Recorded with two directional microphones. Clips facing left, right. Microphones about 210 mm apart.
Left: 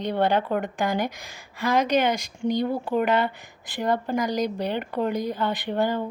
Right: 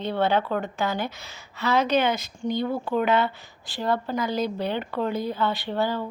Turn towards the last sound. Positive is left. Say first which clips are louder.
# left 1 dB
turn(degrees=15)  # may be behind; listen again after turning